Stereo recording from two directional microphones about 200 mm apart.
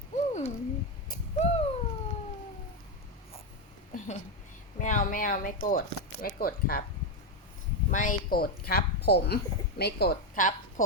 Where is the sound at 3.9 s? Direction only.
40° left (ahead or behind).